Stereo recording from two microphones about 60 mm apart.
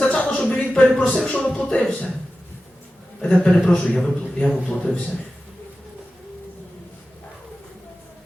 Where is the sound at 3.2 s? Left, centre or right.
Centre.